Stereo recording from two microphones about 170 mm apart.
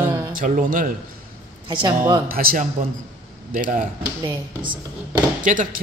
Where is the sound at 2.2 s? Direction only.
60° right (ahead or behind).